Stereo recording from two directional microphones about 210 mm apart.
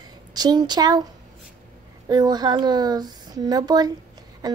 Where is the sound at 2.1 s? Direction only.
20° right (ahead or behind).